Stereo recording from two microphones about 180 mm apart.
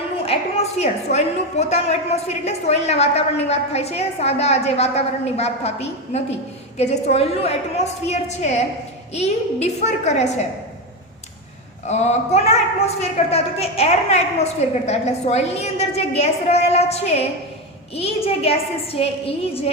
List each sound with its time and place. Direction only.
0.2 s a woman's voice: 35° left (ahead or behind)
11.9 s a woman's voice: 40° left (ahead or behind)